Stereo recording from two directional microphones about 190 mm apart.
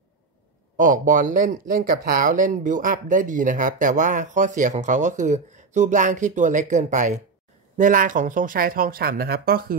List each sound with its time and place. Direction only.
0.7 s speech: 45° right (ahead or behind)